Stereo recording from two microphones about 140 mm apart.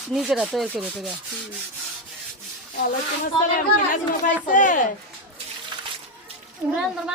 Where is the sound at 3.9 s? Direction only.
65° left (ahead or behind).